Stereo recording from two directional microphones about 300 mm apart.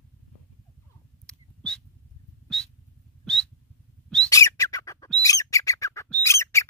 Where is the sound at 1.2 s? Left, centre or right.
Centre.